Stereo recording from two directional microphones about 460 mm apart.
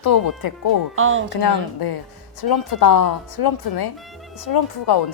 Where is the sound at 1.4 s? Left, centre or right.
Left.